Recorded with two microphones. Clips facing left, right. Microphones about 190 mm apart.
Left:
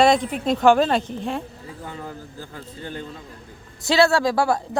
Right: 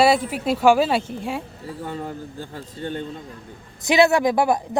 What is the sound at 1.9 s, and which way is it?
Speech, 30° right (ahead or behind).